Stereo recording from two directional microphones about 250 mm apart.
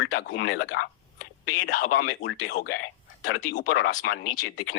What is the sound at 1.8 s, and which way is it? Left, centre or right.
Speech, left.